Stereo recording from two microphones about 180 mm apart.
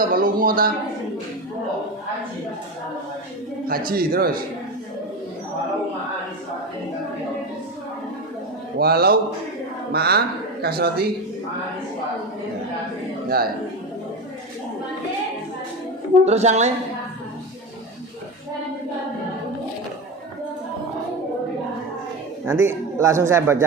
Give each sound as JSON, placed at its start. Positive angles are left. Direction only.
{"t": 0.1, "sound": "speech", "side_deg": -50}
{"t": 3.7, "sound": "speech", "side_deg": -55}
{"t": 8.8, "sound": "speech", "side_deg": -60}
{"t": 13.2, "sound": "a man's voice", "side_deg": -55}
{"t": 16.2, "sound": "speech", "side_deg": -35}
{"t": 22.6, "sound": "a man's voice", "side_deg": -15}